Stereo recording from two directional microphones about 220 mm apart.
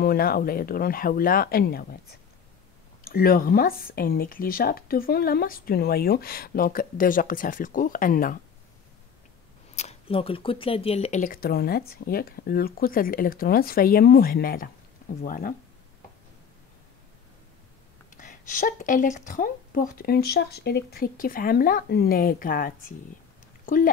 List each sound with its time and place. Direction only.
0.0 s speech: 45° left (ahead or behind)
3.0 s speech: 40° left (ahead or behind)
9.8 s speech: 30° left (ahead or behind)
18.1 s speech: 35° left (ahead or behind)
23.6 s a sound: 40° left (ahead or behind)